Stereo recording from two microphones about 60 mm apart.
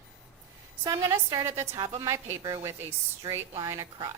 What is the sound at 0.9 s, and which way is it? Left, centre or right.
Speech, right.